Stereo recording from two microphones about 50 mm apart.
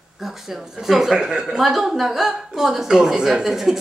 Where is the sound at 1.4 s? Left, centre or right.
Centre.